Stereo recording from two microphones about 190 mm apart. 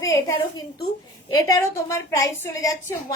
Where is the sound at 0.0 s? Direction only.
15° left (ahead or behind).